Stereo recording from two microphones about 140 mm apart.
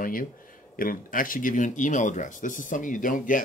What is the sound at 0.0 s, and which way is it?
Speech, 80° left.